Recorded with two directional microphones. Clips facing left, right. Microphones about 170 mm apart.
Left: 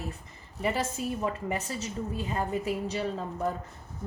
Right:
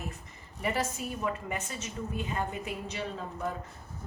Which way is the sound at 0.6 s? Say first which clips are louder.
Left 2 dB; 30° left (ahead or behind).